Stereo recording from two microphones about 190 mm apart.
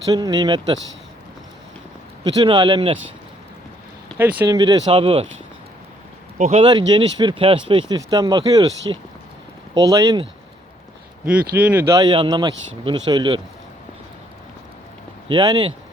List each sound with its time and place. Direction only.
0.0 s speech: 20° right (ahead or behind)
2.4 s speech: 25° right (ahead or behind)
4.2 s speech: 10° right (ahead or behind)
4.5 s speech: 20° right (ahead or behind)
6.4 s speech: 35° right (ahead or behind)
6.7 s speech: 25° right (ahead or behind)
11.3 s speech: 5° right (ahead or behind); by 13.4 s 25° right (ahead or behind)
15.3 s speech: 25° right (ahead or behind)